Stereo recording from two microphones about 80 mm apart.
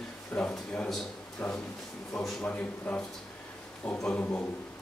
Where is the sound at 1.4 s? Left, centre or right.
Left.